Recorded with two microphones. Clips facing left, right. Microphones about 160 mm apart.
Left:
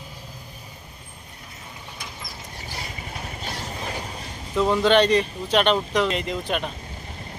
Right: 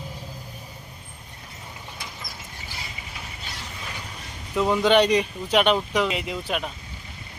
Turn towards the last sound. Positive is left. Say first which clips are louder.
# left 2 dB
turn(degrees=-5)  # may be behind; listen again after turning